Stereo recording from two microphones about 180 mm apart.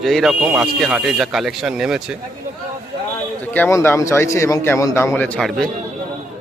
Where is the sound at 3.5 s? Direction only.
10° left (ahead or behind).